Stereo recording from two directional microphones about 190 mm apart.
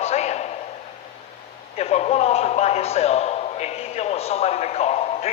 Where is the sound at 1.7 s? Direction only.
35° left (ahead or behind).